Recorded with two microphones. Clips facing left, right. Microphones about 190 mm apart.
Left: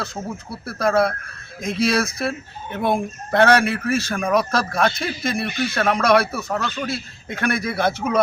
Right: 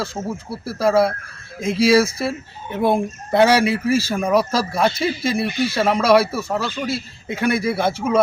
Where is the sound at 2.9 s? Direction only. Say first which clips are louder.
Right 2 dB; 10° right (ahead or behind).